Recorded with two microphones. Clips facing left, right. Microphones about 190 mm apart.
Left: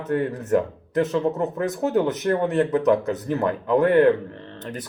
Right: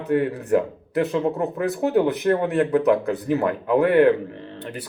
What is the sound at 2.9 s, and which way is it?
Speech, 15° right (ahead or behind).